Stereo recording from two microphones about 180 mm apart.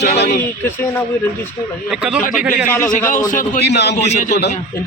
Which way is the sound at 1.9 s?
5° right (ahead or behind).